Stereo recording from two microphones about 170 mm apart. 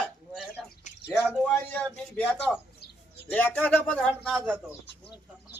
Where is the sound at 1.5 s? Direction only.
5° left (ahead or behind).